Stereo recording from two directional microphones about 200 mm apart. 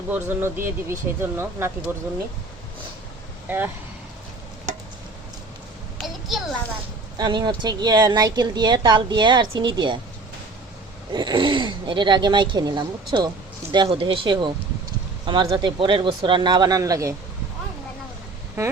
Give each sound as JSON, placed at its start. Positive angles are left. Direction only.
{"t": 0.1, "sound": "speech", "side_deg": -10}
{"t": 6.0, "sound": "a sound", "side_deg": 0}
{"t": 7.2, "sound": "a woman's voice", "side_deg": -20}
{"t": 11.1, "sound": "a woman's voice", "side_deg": -20}